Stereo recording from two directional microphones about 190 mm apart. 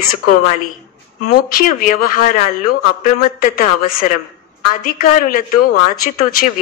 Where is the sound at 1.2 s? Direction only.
50° left (ahead or behind).